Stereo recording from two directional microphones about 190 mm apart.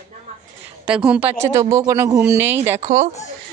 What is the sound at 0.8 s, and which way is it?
Speech, 5° right (ahead or behind).